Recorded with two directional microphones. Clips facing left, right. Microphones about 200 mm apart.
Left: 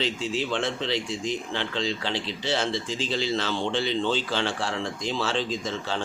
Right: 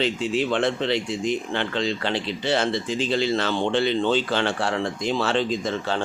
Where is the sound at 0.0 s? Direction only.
55° right (ahead or behind).